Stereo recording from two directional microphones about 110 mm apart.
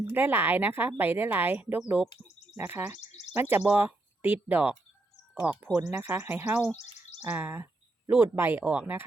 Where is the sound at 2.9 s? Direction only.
85° left.